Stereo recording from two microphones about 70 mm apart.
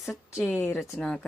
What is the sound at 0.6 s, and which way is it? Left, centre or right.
Speech, left.